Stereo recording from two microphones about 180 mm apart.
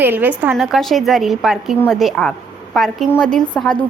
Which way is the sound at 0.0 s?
10° right (ahead or behind).